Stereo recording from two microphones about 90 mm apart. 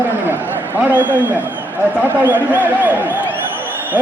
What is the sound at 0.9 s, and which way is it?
Speech, 20° right (ahead or behind).